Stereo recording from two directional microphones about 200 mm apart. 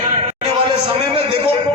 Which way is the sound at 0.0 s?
30° right (ahead or behind).